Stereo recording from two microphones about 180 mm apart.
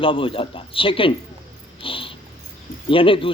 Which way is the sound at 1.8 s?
30° left (ahead or behind).